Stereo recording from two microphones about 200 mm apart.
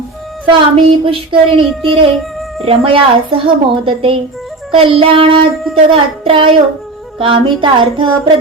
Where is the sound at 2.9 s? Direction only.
25° right (ahead or behind).